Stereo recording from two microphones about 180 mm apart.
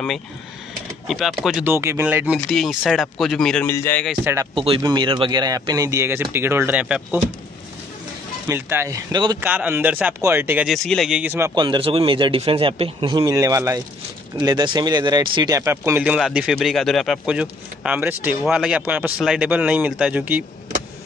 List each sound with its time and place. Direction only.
1.0 s speech: centre (ahead or behind)
4.2 s speech: 10° right (ahead or behind)
4.6 s speech: 30° right (ahead or behind); by 7.2 s 10° right (ahead or behind)
8.5 s speech: 10° right (ahead or behind)
9.4 s speech: 10° right (ahead or behind)
11.5 s speech: 25° right (ahead or behind); by 20.4 s 10° right (ahead or behind)